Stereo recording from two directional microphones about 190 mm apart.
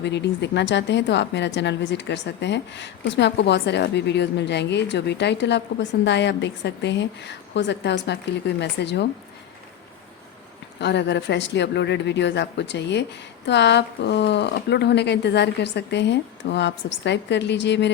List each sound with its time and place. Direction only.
0.0 s a woman's voice: 65° left (ahead or behind)
10.8 s a woman's voice: 65° left (ahead or behind)